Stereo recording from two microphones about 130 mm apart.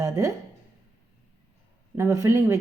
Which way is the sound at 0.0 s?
25° right (ahead or behind).